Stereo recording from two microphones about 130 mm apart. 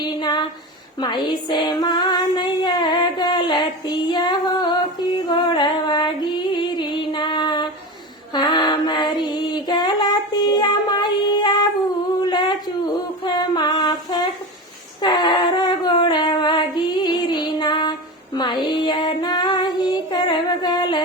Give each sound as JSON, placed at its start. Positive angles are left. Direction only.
{"t": 0.0, "sound": "a sound", "side_deg": 35}
{"t": 0.9, "sound": "female singing", "side_deg": 35}
{"t": 6.5, "sound": "music", "side_deg": 35}
{"t": 12.3, "sound": "a sound", "side_deg": 35}
{"t": 13.2, "sound": "singing", "side_deg": 35}
{"t": 18.3, "sound": "child singing", "side_deg": 35}